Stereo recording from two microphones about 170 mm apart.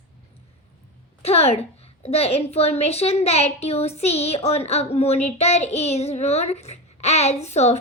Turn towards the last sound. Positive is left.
turn(degrees=40)  # may be behind; listen again after turning